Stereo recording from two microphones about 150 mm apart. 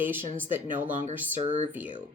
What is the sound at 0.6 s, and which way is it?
Speech, 55° right (ahead or behind).